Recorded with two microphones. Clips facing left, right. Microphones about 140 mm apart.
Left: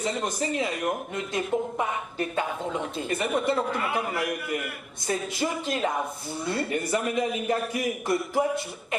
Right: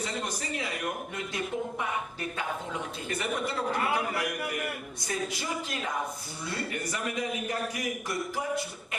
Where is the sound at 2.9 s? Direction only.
25° left (ahead or behind).